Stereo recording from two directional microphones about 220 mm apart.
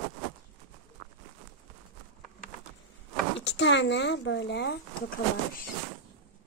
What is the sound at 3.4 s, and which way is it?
Speech, 55° left (ahead or behind).